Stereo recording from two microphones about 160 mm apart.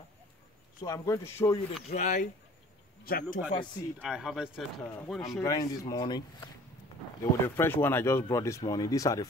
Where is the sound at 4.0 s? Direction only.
5° right (ahead or behind).